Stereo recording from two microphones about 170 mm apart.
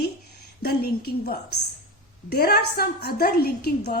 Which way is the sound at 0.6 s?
70° left (ahead or behind).